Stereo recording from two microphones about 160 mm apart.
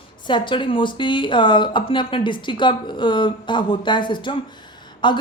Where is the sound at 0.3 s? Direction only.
30° left (ahead or behind).